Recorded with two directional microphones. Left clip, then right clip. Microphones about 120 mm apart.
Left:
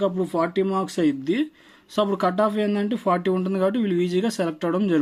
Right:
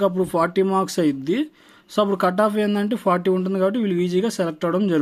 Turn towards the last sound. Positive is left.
turn(degrees=-25)  # may be behind; listen again after turning